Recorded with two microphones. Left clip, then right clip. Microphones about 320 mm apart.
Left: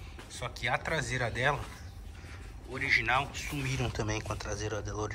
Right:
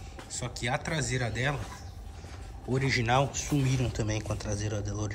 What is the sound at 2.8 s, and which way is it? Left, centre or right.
Speech, centre.